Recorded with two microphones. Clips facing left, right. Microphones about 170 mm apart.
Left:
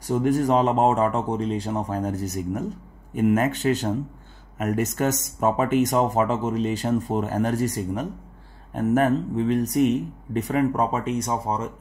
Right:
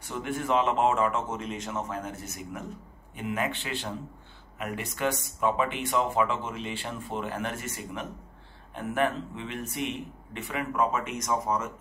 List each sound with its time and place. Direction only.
0.0 s speech: 40° left (ahead or behind)